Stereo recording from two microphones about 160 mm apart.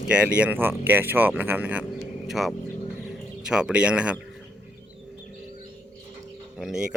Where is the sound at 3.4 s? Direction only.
5° right (ahead or behind).